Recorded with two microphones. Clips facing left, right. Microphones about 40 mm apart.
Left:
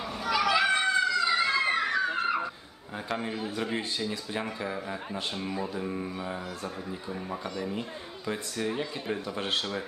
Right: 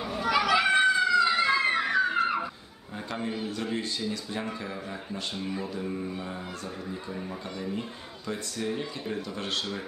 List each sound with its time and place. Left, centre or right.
0.0 s children playing: centre
0.7 s a sound: centre
3.4 s speech: centre
8.3 s speech: centre